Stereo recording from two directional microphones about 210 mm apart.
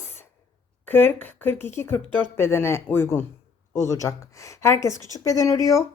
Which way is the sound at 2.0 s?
25° right (ahead or behind).